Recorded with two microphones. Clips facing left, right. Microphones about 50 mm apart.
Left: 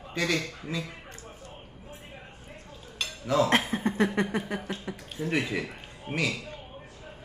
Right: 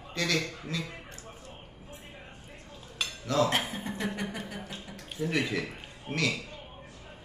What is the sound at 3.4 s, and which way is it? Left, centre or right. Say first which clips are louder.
Speech: left 5 dB; left.